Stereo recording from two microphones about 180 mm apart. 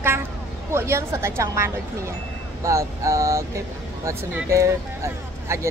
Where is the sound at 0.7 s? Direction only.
15° right (ahead or behind).